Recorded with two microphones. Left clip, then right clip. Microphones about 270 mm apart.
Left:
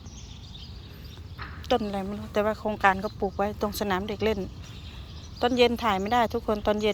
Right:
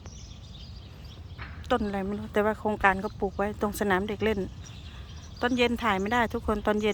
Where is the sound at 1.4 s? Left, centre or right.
Centre.